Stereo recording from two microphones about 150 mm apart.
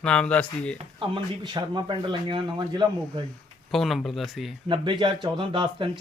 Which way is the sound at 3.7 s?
Centre (ahead or behind).